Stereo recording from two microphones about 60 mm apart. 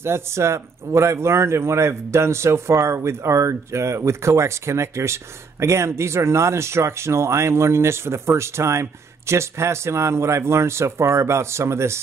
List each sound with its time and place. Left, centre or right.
0.0 s speech: right